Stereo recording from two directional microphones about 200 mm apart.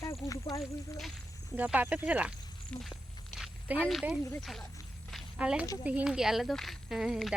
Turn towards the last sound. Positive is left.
turn(degrees=0)  # may be behind; listen again after turning